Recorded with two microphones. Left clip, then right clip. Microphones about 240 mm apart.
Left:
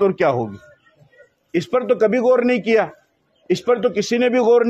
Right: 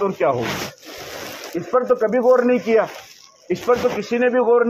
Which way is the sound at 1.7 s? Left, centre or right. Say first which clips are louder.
Even; left.